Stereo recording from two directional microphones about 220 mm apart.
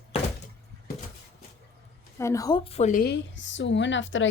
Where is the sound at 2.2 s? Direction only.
15° left (ahead or behind).